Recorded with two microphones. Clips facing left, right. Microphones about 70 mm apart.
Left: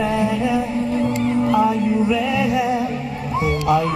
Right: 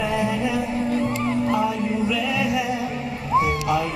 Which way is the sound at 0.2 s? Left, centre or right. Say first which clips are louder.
Left 4 dB; left.